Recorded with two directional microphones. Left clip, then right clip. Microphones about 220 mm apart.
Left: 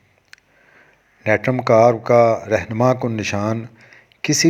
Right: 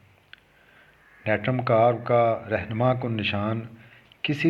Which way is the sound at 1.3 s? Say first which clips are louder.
Left 8 dB; 40° left (ahead or behind).